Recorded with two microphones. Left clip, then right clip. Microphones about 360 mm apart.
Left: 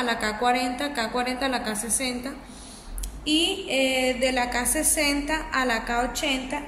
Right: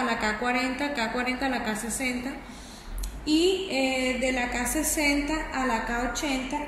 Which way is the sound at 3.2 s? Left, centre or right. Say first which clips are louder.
Even; left.